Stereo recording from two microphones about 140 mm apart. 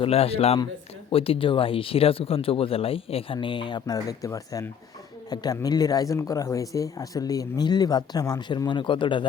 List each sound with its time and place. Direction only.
0.0 s speech: 45° left (ahead or behind)